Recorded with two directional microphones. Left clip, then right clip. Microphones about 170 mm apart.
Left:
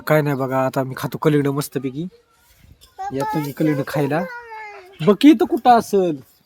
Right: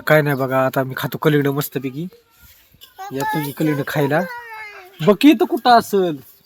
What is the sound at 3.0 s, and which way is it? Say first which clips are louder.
Speech: even; 65° left (ahead or behind).